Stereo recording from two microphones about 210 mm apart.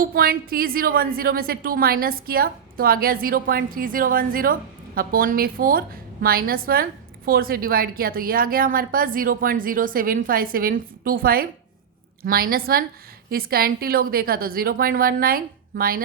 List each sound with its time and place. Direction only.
0.0 s a woman's voice: 45° right (ahead or behind)